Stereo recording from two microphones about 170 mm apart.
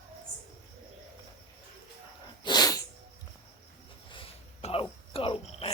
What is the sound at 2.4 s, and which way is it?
Sneeze, 25° left (ahead or behind).